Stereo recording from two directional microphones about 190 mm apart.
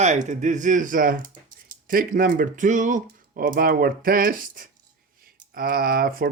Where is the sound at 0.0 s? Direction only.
40° right (ahead or behind).